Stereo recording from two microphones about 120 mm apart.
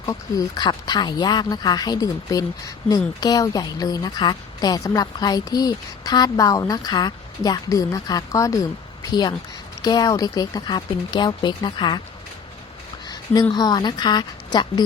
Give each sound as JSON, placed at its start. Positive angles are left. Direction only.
{"t": 0.1, "sound": "a woman's voice", "side_deg": 30}
{"t": 9.8, "sound": "a woman's voice", "side_deg": 35}
{"t": 13.5, "sound": "a woman's voice", "side_deg": 35}